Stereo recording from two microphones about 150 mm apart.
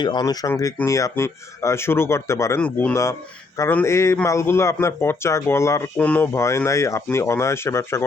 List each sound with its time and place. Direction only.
0.0 s a man's voice: 30° left (ahead or behind); by 2.9 s 10° left (ahead or behind)
2.9 s a man's voice: 20° left (ahead or behind)